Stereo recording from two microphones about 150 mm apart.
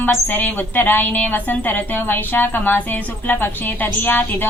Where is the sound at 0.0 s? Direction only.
10° left (ahead or behind).